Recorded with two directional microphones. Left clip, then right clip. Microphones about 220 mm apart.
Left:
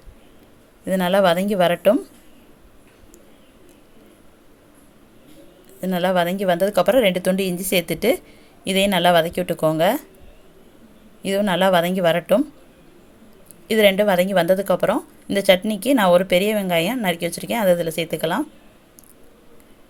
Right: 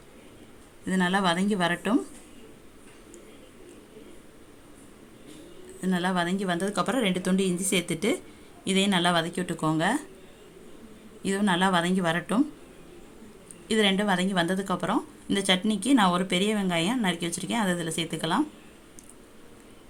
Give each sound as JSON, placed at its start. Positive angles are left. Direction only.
{"t": 0.9, "sound": "a woman's voice", "side_deg": 25}
{"t": 5.8, "sound": "a woman's voice", "side_deg": 25}
{"t": 11.2, "sound": "a woman's voice", "side_deg": 20}
{"t": 13.7, "sound": "a woman's voice", "side_deg": 25}